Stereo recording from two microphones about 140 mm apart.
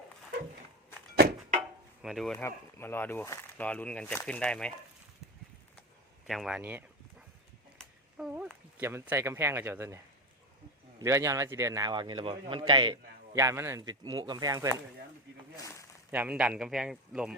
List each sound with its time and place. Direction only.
2.0 s speech: centre (ahead or behind)
2.4 s speech: 15° left (ahead or behind)
6.2 s speech: centre (ahead or behind)
6.6 s speech: 15° right (ahead or behind)
8.3 s speech: 10° right (ahead or behind)
11.0 s a man's voice: 20° right (ahead or behind)
13.3 s speech: 20° right (ahead or behind)
15.5 s a sound: 20° left (ahead or behind)
16.1 s a man's voice: 10° right (ahead or behind)